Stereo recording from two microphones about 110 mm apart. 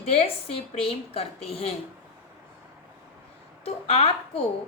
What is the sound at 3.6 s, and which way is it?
Speech, 65° left (ahead or behind).